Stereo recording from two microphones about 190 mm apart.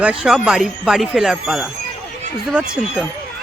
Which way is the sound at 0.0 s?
5° right (ahead or behind).